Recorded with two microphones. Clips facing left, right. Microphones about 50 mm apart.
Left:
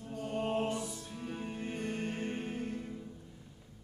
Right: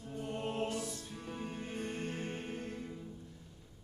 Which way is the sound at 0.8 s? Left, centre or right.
Centre.